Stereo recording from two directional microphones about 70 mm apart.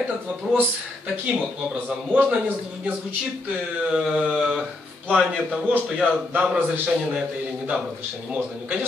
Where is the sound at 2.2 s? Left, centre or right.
Centre.